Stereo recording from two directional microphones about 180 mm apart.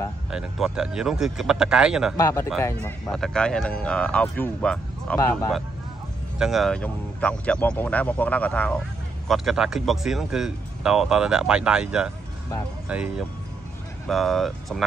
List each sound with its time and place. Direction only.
0.3 s speech: 5° right (ahead or behind)
2.1 s speech: 20° left (ahead or behind)
2.6 s speech: 5° left (ahead or behind)
6.3 s speech: centre (ahead or behind)